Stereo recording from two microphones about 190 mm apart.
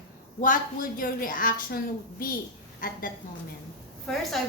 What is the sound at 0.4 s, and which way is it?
A woman's voice, 45° left (ahead or behind).